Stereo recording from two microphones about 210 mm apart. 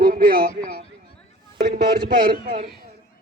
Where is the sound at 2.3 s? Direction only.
40° right (ahead or behind).